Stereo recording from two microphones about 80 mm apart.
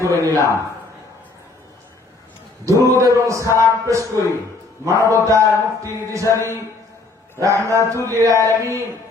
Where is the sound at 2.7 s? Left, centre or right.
Right.